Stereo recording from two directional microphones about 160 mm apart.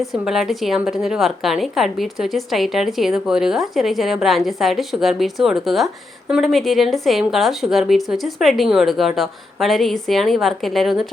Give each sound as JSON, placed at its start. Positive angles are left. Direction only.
{"t": 0.0, "sound": "a woman's voice", "side_deg": 0}